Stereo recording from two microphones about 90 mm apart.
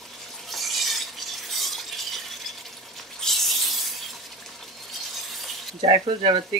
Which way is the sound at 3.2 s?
Centre (ahead or behind).